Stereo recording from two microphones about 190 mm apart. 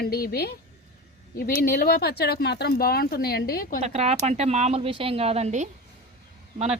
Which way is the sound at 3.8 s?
35° right (ahead or behind).